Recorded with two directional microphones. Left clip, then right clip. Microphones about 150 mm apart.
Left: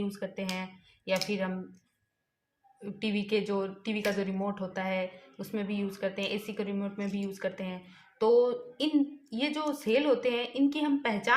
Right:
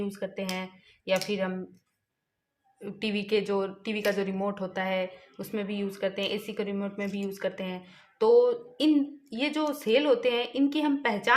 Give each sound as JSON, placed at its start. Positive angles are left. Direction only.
{"t": 0.0, "sound": "speech", "side_deg": -30}
{"t": 2.8, "sound": "a woman's voice", "side_deg": -35}